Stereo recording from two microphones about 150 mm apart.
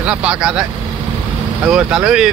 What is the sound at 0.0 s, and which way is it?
Speech, 5° right (ahead or behind).